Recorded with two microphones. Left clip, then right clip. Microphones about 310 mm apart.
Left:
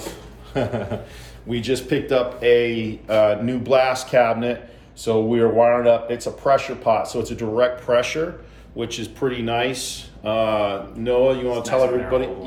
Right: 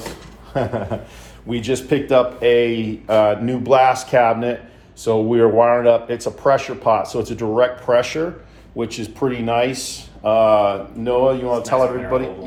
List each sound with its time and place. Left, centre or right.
0.5 s speech: centre